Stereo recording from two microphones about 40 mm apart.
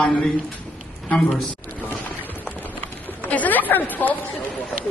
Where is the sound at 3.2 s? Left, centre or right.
Left.